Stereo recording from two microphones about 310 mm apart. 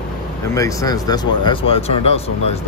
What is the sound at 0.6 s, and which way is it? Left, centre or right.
Speech, centre.